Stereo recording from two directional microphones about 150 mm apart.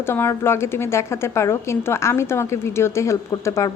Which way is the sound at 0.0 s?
15° left (ahead or behind).